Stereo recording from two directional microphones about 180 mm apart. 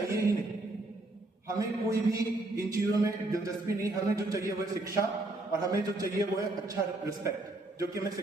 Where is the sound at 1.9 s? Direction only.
15° right (ahead or behind).